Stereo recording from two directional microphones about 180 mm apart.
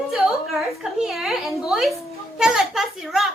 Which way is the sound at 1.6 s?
Centre (ahead or behind).